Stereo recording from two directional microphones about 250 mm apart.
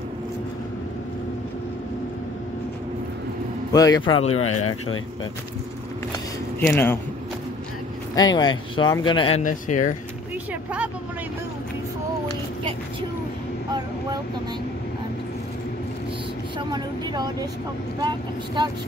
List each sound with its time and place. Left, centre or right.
3.7 s speech: centre
4.3 s speech: left
6.6 s speech: centre
8.1 s speech: centre
9.4 s speech: left
10.5 s vehicle: centre
16.5 s speech: centre